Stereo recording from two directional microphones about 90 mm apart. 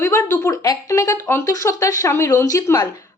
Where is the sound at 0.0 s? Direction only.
30° left (ahead or behind).